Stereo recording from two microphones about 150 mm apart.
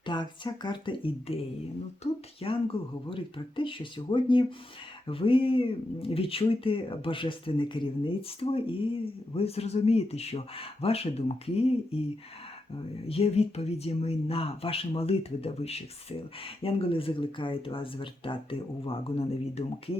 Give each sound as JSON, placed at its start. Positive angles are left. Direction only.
{"t": 0.0, "sound": "speech", "side_deg": 30}
{"t": 2.4, "sound": "speech", "side_deg": 40}
{"t": 13.1, "sound": "speech", "side_deg": 40}